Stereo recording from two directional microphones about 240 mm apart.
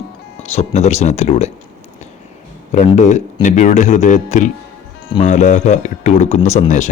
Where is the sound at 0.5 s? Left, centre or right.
Left.